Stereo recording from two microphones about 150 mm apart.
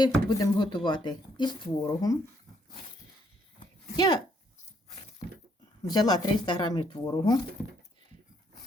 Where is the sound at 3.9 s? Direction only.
30° left (ahead or behind).